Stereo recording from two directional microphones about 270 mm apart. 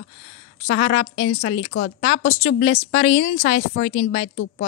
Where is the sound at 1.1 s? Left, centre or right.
Left.